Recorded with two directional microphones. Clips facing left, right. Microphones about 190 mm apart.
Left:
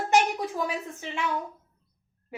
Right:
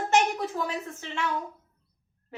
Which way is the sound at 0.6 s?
15° left (ahead or behind).